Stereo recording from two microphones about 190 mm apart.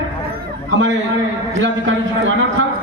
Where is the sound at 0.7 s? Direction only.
75° right (ahead or behind).